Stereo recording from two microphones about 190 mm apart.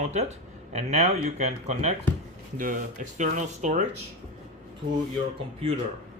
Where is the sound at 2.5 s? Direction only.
45° right (ahead or behind).